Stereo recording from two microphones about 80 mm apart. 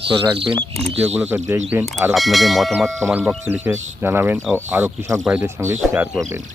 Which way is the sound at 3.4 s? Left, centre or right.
Right.